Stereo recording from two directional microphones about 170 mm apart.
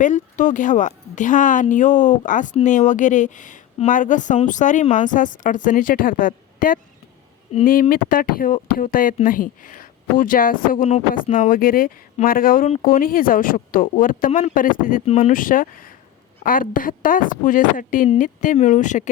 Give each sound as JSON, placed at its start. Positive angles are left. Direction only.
{"t": 0.0, "sound": "a woman's voice", "side_deg": 50}
{"t": 15.0, "sound": "speech", "side_deg": 40}
{"t": 15.3, "sound": "a woman's voice", "side_deg": 55}